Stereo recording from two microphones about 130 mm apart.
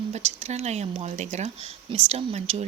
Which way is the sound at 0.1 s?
55° right (ahead or behind).